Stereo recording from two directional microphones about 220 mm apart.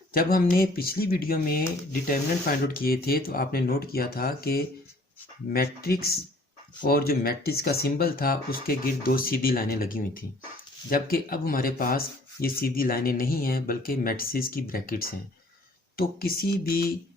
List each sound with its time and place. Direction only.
0.1 s speech: 40° left (ahead or behind)